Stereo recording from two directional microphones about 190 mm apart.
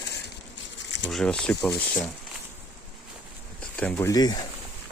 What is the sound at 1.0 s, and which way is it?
Speech, 5° left (ahead or behind).